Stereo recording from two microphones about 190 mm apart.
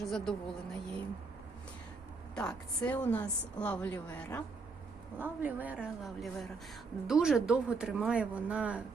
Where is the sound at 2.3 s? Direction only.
5° left (ahead or behind).